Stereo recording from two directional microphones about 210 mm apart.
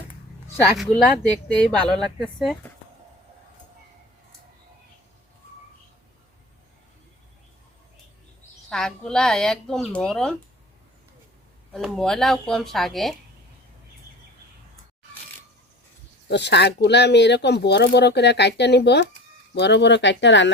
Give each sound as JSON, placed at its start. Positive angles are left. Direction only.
{"t": 1.5, "sound": "speech", "side_deg": 5}
{"t": 8.7, "sound": "speech", "side_deg": 5}
{"t": 11.7, "sound": "speech", "side_deg": 0}
{"t": 16.3, "sound": "speech", "side_deg": 55}